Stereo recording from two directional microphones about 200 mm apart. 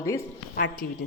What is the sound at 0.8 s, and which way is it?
Speech, 50° left (ahead or behind).